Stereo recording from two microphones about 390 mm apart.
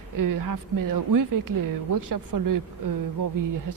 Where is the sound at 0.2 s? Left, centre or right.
Right.